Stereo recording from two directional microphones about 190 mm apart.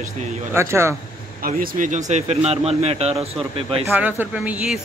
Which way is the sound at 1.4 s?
45° right (ahead or behind).